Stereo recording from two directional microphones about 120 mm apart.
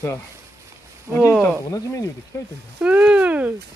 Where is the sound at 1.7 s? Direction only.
30° left (ahead or behind).